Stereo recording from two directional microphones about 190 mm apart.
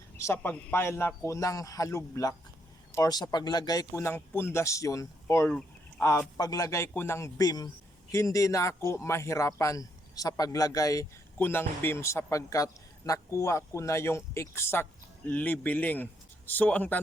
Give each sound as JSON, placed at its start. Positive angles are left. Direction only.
{"t": 0.2, "sound": "a man's voice", "side_deg": 15}